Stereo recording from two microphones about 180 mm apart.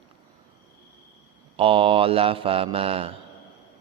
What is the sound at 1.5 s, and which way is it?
Speech, 30° right (ahead or behind).